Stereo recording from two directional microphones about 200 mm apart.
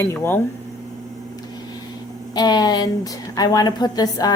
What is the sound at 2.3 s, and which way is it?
A woman's voice, 20° left (ahead or behind).